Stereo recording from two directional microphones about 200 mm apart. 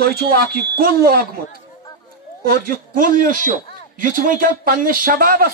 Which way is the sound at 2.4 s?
45° right (ahead or behind).